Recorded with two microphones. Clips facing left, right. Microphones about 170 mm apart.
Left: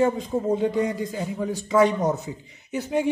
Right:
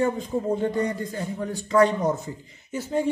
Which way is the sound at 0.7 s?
90° left.